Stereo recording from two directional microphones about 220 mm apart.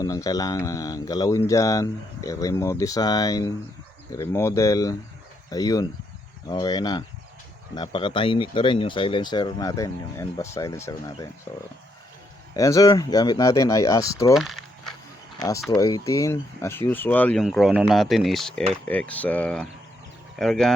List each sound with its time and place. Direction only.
0.0 s speech: 15° left (ahead or behind)
14.3 s a sound: centre (ahead or behind)
15.4 s speech: 15° left (ahead or behind)